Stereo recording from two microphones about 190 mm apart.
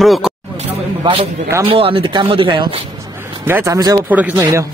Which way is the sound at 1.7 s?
30° right (ahead or behind).